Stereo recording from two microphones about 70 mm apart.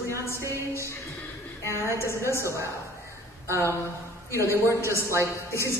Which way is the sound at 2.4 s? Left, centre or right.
Right.